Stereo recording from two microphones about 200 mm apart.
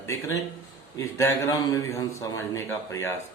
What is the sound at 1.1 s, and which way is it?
A man's voice, 15° left (ahead or behind).